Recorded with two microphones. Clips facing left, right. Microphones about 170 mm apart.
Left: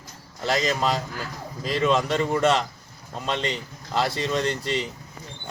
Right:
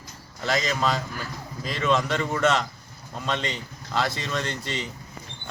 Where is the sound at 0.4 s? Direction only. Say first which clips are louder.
Left 2 dB; 35° left (ahead or behind).